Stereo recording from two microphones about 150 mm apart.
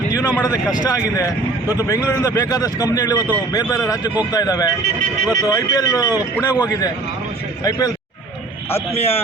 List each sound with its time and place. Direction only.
0.8 s a man's voice: 25° left (ahead or behind)